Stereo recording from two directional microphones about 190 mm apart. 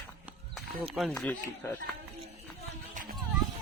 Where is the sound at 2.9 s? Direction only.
45° right (ahead or behind).